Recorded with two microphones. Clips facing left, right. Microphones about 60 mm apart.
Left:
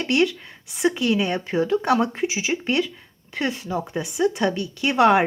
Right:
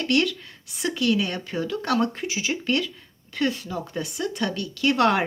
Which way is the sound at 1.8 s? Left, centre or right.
Centre.